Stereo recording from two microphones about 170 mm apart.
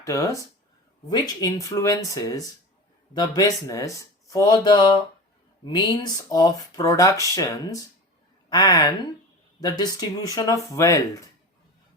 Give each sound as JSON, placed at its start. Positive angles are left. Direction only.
{"t": 0.0, "sound": "speech", "side_deg": 20}
{"t": 1.4, "sound": "speech", "side_deg": 20}